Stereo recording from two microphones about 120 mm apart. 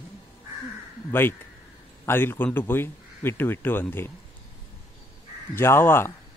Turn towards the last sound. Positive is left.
turn(degrees=20)  # may be behind; listen again after turning